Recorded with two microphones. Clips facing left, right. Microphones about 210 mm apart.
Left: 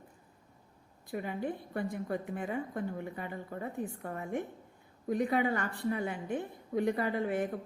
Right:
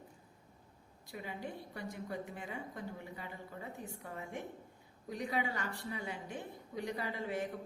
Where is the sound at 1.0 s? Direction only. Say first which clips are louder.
Left 8 dB; 55° left (ahead or behind).